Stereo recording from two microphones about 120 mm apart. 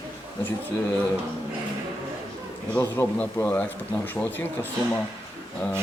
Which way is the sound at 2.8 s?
20° left (ahead or behind).